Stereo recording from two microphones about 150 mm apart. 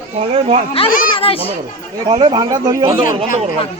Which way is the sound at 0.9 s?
65° left (ahead or behind).